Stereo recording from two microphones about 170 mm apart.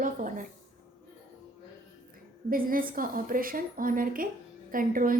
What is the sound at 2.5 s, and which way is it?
A woman's voice, 55° right (ahead or behind).